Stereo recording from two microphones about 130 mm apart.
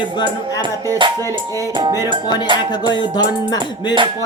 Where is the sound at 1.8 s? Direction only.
25° right (ahead or behind).